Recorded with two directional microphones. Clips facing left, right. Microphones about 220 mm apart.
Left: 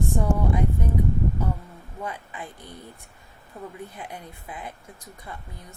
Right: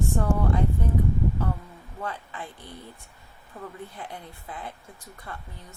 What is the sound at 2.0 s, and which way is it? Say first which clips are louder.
Speech: even; 15° left (ahead or behind).